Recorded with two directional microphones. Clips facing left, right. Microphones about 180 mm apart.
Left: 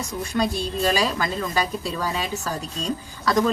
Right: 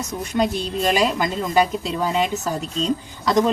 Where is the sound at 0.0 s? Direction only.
20° right (ahead or behind).